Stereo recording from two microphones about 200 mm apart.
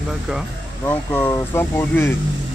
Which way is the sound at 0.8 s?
10° left (ahead or behind).